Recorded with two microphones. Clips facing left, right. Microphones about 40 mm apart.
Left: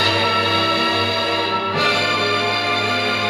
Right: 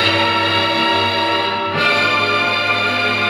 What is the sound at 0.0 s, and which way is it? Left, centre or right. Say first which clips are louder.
Music: right 2 dB; right.